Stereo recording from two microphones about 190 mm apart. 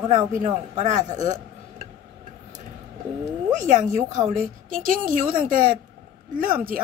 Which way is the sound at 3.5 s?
40° right (ahead or behind).